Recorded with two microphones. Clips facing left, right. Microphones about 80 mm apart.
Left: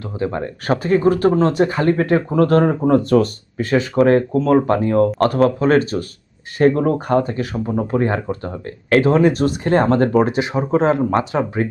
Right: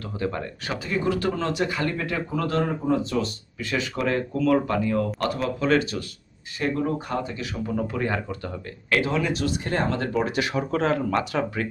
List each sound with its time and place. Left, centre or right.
0.0 s speech: left
0.6 s speech: left
10.3 s speech: left